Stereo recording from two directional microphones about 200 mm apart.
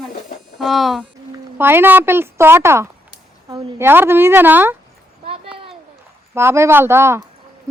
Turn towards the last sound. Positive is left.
turn(degrees=-15)  # may be behind; listen again after turning